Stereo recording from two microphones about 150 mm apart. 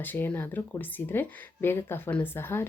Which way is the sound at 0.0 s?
15° left (ahead or behind).